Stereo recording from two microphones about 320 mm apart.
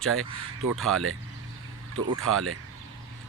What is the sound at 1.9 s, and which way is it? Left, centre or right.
Speech, right.